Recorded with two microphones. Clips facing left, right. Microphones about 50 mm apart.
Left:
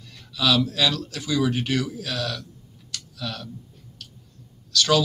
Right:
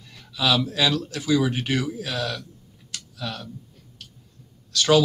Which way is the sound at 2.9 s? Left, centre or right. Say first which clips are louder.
Even; right.